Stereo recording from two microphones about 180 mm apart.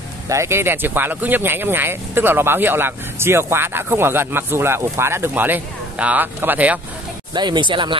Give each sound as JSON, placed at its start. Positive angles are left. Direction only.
{"t": 0.3, "sound": "speech", "side_deg": -15}
{"t": 7.3, "sound": "speech", "side_deg": -25}